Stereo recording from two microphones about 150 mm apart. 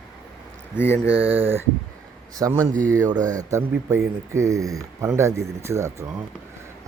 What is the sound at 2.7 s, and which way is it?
Speech, 60° right (ahead or behind).